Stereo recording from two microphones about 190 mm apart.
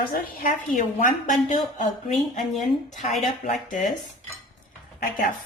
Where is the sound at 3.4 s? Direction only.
40° left (ahead or behind).